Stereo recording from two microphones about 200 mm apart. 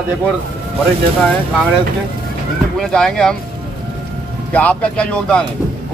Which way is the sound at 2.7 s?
Centre (ahead or behind).